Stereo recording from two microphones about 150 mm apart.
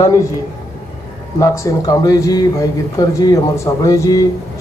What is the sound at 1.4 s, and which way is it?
Speech, 20° left (ahead or behind).